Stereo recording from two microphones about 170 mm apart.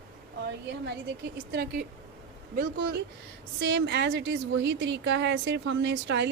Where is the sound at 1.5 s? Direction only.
70° right (ahead or behind).